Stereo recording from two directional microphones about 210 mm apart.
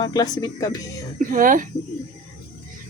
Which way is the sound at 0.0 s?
20° left (ahead or behind).